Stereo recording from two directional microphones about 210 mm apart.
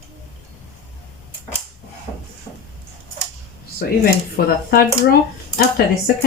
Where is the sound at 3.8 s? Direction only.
45° left (ahead or behind).